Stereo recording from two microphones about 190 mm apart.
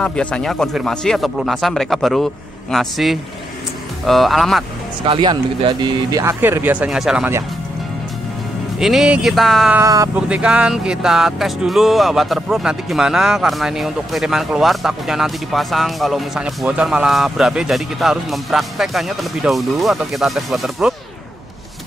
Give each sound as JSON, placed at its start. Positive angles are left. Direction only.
{"t": 0.0, "sound": "speech", "side_deg": 5}
{"t": 5.0, "sound": "speech", "side_deg": -25}
{"t": 8.7, "sound": "speech", "side_deg": 0}
{"t": 9.8, "sound": "speech", "side_deg": -15}
{"t": 10.1, "sound": "speech", "side_deg": -5}